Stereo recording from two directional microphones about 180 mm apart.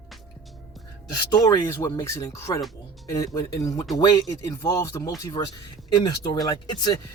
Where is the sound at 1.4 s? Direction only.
15° left (ahead or behind).